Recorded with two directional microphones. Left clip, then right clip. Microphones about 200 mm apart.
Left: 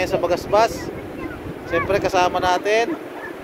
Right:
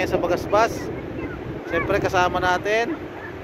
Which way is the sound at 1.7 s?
5° left (ahead or behind).